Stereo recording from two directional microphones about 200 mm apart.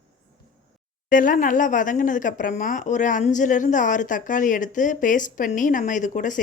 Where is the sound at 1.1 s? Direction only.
40° left (ahead or behind).